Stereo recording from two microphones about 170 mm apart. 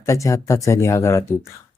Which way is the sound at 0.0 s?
20° left (ahead or behind).